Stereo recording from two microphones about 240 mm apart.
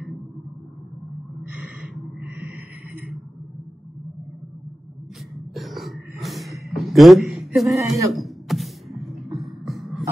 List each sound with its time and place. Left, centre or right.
1.5 s gasp: centre
5.5 s gasp: centre
7.6 s speech: centre
8.1 s a sound: centre
9.4 s beatboxing: centre